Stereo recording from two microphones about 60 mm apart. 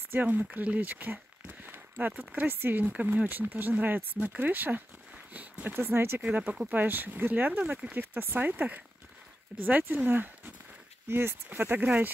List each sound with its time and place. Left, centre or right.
0.1 s speech: right
6.2 s speech: right
11.1 s speech: right